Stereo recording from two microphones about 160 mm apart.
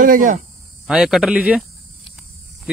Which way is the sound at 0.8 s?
5° right (ahead or behind).